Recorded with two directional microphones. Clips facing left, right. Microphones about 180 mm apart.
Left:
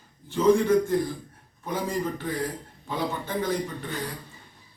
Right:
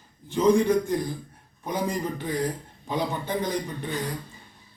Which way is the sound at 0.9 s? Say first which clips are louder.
Left 2 dB; 15° right (ahead or behind).